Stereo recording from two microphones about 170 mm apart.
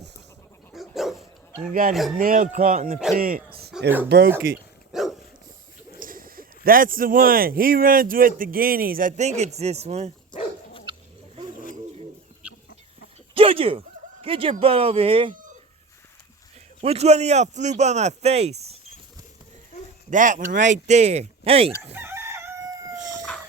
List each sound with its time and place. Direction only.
0.7 s dog: centre (ahead or behind)
1.9 s speech: centre (ahead or behind)
2.1 s speech: 55° right (ahead or behind)
3.8 s speech: 10° right (ahead or behind)
4.4 s speech: 60° right (ahead or behind)
4.9 s dog: centre (ahead or behind)
6.0 s speech: 55° right (ahead or behind); by 10.1 s 40° right (ahead or behind)
13.3 s a sound: 35° right (ahead or behind)
14.6 s speech: 35° right (ahead or behind)
16.8 s speech: 40° right (ahead or behind)
20.1 s speech: 50° right (ahead or behind)
21.9 s crowing: 15° right (ahead or behind)